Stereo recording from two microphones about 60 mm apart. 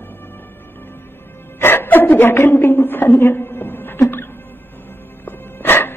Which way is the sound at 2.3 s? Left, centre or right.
Left.